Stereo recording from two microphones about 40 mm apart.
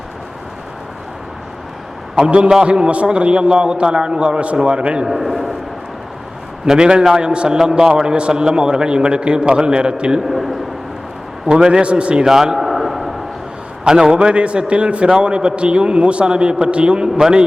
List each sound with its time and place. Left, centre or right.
2.1 s a man's voice: right
5.0 s a man's voice: centre
6.7 s a man's voice: right
10.2 s a man's voice: centre
11.4 s a man's voice: right
12.2 s a sound: centre
13.8 s a man's voice: centre